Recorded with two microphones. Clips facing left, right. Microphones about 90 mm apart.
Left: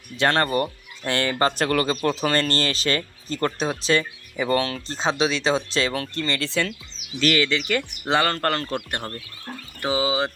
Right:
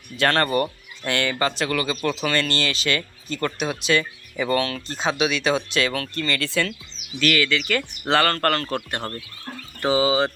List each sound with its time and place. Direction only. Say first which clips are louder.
0.2 s speech: even; 20° left (ahead or behind)
1.0 s speech: left 1 dB; 30° left (ahead or behind); by 10.3 s 10° left (ahead or behind)